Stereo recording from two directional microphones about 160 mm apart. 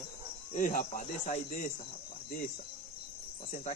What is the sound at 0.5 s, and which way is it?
Speech, 55° left (ahead or behind).